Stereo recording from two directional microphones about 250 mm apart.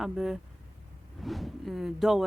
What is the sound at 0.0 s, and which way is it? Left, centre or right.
Speech, centre.